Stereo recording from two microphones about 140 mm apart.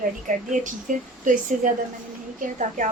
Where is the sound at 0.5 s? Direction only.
65° right (ahead or behind).